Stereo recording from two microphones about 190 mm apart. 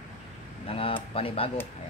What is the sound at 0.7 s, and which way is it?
Speech, 30° left (ahead or behind).